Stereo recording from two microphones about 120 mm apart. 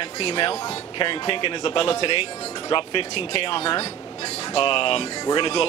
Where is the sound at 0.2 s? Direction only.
55° left (ahead or behind).